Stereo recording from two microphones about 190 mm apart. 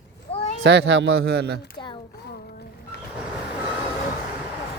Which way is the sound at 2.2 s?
60° left (ahead or behind).